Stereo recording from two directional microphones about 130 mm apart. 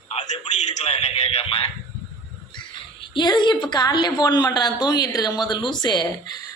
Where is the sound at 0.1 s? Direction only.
65° left (ahead or behind); by 1.6 s 50° left (ahead or behind).